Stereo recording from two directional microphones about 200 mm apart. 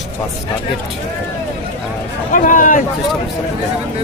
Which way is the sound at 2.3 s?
40° left (ahead or behind).